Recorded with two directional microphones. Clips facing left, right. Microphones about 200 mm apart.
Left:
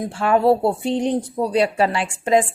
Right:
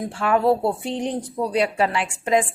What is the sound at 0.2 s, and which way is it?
Speech, 30° left (ahead or behind).